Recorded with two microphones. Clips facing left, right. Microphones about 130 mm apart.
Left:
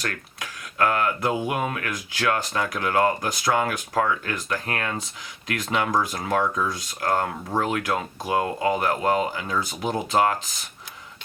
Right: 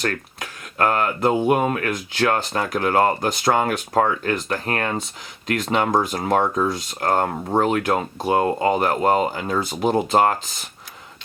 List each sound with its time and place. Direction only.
0.0 s speech: 40° right (ahead or behind); by 6.7 s 25° right (ahead or behind)
7.0 s speech: 45° right (ahead or behind)